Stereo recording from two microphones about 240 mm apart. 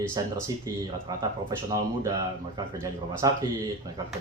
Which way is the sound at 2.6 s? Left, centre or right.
Centre.